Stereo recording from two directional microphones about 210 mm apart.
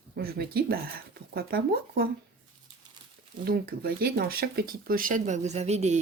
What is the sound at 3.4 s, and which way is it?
Speech, 45° right (ahead or behind).